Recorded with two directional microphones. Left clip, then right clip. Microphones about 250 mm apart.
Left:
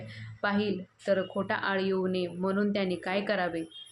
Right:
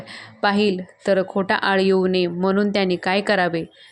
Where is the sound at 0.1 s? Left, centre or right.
Right.